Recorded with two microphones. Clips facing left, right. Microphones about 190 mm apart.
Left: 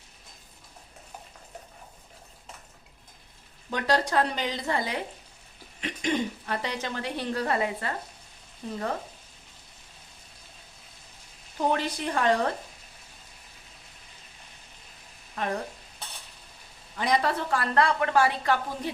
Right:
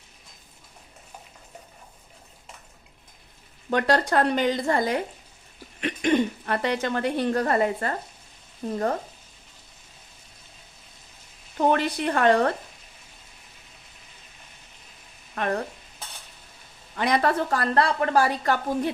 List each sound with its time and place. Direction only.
3.7 s speech: 55° right (ahead or behind)
5.8 s speech: 60° right (ahead or behind)
11.5 s speech: 60° right (ahead or behind)
15.4 s frying: 65° right (ahead or behind)
17.0 s a woman's voice: 60° right (ahead or behind); by 18.6 s 45° right (ahead or behind)